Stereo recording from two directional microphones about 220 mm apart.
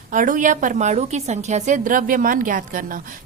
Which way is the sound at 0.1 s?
35° right (ahead or behind).